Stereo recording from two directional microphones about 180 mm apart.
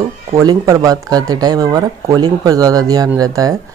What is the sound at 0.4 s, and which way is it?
A woman's voice, 20° right (ahead or behind).